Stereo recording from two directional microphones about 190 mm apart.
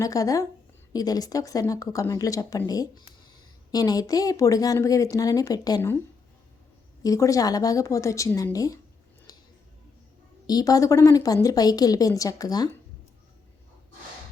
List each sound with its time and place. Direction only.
0.0 s speech: 15° left (ahead or behind)
7.0 s speech: 15° left (ahead or behind)
10.4 s a woman's voice: 20° left (ahead or behind)